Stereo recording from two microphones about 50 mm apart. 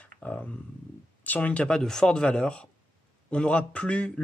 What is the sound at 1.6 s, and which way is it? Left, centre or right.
Speech, centre.